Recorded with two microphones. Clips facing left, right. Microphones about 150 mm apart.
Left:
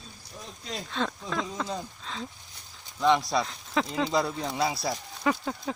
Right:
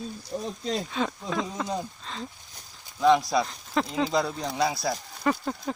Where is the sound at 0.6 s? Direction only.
25° right (ahead or behind).